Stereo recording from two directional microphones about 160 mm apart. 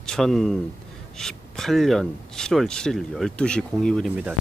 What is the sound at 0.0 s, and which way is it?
Speech, 5° left (ahead or behind).